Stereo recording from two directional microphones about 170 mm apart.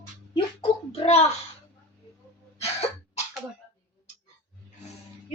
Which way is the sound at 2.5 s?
35° left (ahead or behind).